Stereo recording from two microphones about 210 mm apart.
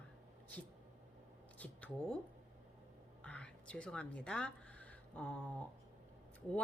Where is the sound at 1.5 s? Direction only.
5° left (ahead or behind).